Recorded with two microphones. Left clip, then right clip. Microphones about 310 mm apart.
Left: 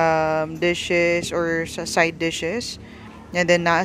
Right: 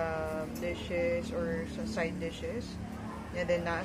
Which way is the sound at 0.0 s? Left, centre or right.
Left.